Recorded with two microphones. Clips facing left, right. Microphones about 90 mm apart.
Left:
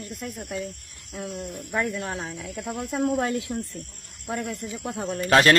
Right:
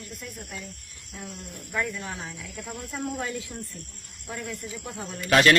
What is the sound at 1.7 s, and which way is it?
Speech, 60° left (ahead or behind).